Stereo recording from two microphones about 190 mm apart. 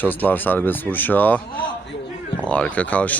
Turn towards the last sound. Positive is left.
turn(degrees=5)  # may be behind; listen again after turning